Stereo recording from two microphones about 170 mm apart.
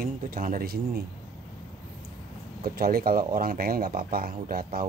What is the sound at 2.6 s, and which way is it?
A man's voice, 60° right (ahead or behind).